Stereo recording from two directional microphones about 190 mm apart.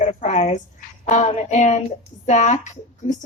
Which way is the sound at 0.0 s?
40° left (ahead or behind).